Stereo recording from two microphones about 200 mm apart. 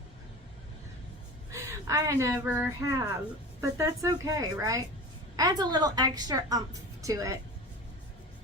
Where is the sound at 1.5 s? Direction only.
15° right (ahead or behind).